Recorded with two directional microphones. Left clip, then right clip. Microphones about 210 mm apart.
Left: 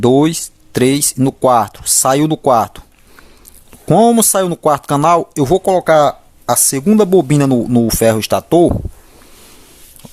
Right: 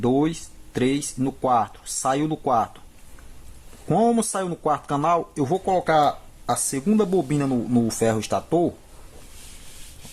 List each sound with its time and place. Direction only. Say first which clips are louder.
0.0 s speech: left 11 dB; 50° left (ahead or behind)
3.8 s speech: left 10 dB; 50° left (ahead or behind)